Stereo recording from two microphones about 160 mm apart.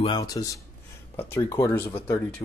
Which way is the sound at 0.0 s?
25° left (ahead or behind).